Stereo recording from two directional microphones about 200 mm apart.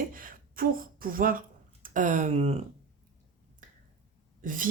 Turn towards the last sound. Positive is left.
turn(degrees=-40)  # may be behind; listen again after turning